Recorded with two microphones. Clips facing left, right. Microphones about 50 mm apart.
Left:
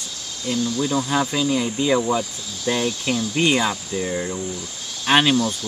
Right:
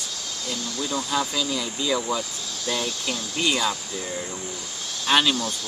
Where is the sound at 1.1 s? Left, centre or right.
Left.